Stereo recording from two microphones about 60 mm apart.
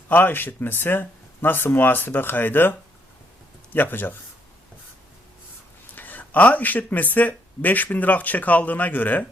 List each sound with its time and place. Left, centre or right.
0.1 s speech: left
5.9 s speech: left